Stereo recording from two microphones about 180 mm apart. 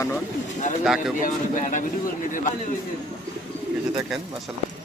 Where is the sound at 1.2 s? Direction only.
45° left (ahead or behind).